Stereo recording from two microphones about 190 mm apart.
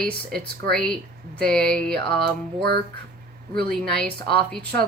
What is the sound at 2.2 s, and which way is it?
Music, 60° right (ahead or behind).